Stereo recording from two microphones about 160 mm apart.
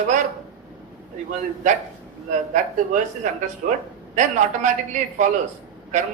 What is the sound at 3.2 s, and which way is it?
A woman's voice, 50° right (ahead or behind).